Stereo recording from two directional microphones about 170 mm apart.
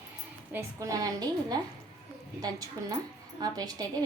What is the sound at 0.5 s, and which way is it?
A woman's voice, 20° right (ahead or behind).